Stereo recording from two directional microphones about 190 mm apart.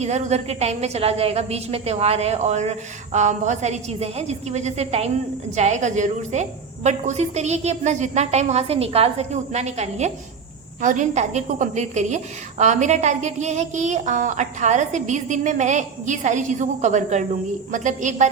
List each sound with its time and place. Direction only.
0.0 s a woman's voice: 35° right (ahead or behind)